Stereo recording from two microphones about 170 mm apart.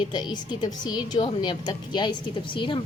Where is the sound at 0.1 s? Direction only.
25° left (ahead or behind).